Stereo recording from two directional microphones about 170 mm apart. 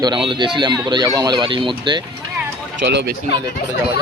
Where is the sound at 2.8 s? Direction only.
90° right.